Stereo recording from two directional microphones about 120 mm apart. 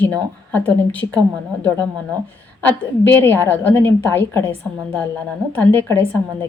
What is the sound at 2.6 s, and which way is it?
A woman's voice, 15° left (ahead or behind).